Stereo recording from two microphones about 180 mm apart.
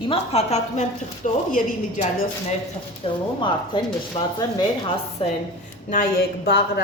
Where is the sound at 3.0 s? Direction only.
30° left (ahead or behind).